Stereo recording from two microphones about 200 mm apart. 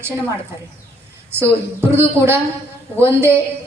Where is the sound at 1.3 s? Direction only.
10° right (ahead or behind).